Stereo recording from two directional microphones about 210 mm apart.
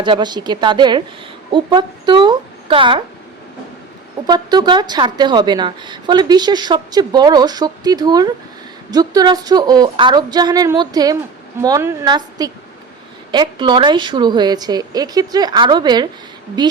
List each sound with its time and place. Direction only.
0.0 s a woman's voice: 20° right (ahead or behind)
4.3 s a woman's voice: 20° right (ahead or behind)